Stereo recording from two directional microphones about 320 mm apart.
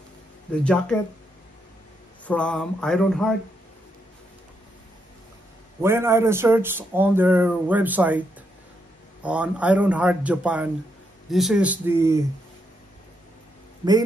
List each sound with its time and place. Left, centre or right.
0.5 s a man's voice: centre
2.2 s a man's voice: centre
5.8 s speech: centre
9.2 s a man's voice: centre